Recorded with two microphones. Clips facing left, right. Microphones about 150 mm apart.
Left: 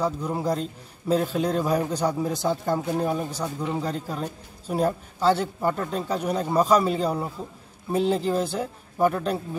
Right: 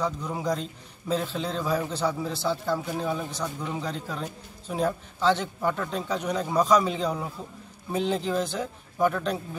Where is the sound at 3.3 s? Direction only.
10° left (ahead or behind).